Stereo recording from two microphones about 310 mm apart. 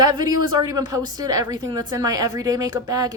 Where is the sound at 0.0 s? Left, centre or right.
Centre.